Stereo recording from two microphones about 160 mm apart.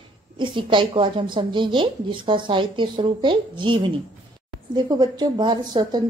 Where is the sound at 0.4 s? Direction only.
30° right (ahead or behind).